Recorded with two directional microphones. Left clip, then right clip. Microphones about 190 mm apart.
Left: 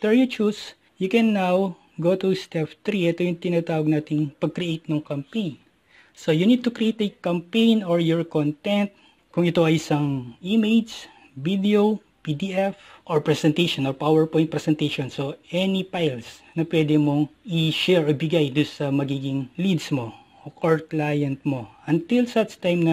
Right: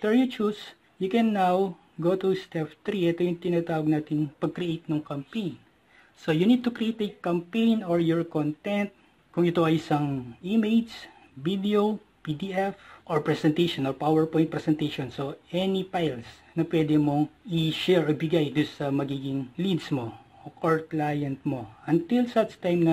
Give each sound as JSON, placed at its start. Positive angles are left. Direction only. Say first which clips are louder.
{"t": 0.0, "sound": "speech", "louder": "left 4 dB", "side_deg": 35}